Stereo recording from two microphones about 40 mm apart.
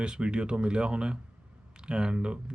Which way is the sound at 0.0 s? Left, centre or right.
Right.